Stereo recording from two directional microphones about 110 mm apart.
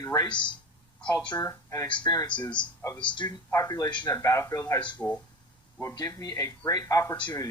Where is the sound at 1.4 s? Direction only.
30° left (ahead or behind).